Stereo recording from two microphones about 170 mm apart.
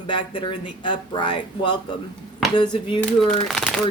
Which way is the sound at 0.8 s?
30° left (ahead or behind).